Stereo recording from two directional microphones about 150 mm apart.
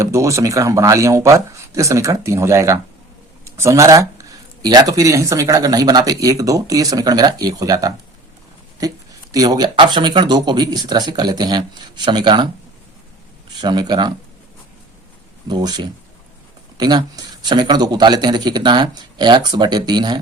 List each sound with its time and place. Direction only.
0.0 s speech: 20° right (ahead or behind)
9.3 s speech: 25° right (ahead or behind)
13.5 s speech: 30° right (ahead or behind)
15.4 s speech: 30° right (ahead or behind)